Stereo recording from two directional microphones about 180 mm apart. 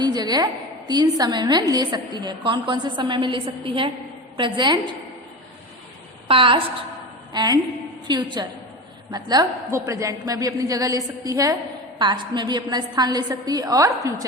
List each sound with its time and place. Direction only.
0.0 s a sound: 20° right (ahead or behind)
0.9 s a woman's voice: 25° right (ahead or behind)
6.2 s a woman's voice: 30° right (ahead or behind)